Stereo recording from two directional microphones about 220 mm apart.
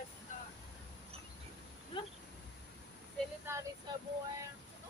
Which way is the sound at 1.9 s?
25° left (ahead or behind).